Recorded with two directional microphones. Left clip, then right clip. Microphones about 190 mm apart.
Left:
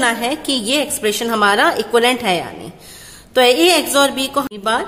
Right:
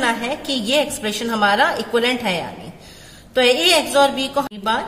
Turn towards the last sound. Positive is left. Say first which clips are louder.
# left 2 dB
turn(degrees=30)  # may be behind; listen again after turning